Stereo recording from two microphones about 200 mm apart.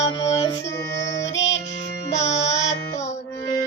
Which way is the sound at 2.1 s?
35° left (ahead or behind).